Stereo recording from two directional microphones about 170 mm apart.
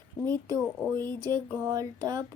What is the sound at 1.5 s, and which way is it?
Child singing, 20° right (ahead or behind).